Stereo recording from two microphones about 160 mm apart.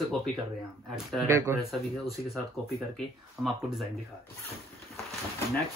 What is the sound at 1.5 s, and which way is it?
Speech, centre (ahead or behind).